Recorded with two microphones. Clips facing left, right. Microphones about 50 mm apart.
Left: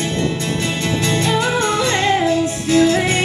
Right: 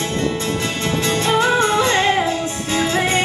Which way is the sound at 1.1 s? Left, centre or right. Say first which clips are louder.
Right 3 dB; right.